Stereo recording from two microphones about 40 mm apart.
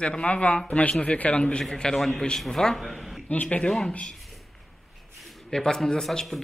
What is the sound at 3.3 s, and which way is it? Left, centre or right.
Speech, left.